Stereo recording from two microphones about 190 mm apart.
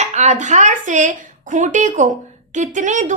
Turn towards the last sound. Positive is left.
turn(degrees=-40)  # may be behind; listen again after turning